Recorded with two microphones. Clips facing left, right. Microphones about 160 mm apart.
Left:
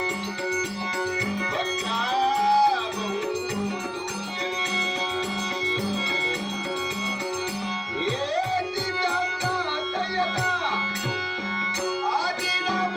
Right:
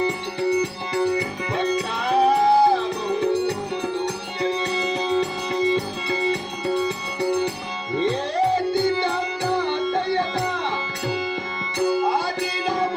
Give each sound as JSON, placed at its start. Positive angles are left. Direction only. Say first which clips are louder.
{"t": 1.5, "sound": "music", "louder": "right 5 dB", "side_deg": -55}
{"t": 9.6, "sound": "music", "louder": "right 6 dB", "side_deg": -55}